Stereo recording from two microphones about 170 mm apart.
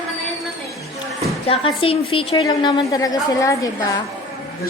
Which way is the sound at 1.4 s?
35° left (ahead or behind).